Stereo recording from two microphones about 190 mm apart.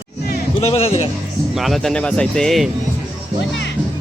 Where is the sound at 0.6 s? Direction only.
30° left (ahead or behind).